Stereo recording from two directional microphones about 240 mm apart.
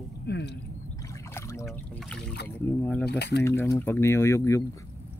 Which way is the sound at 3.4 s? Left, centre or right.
Centre.